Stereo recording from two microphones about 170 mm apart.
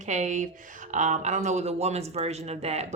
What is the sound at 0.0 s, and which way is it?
Speech, 45° right (ahead or behind).